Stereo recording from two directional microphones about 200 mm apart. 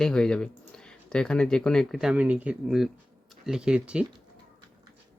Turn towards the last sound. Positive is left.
turn(degrees=-5)  # may be behind; listen again after turning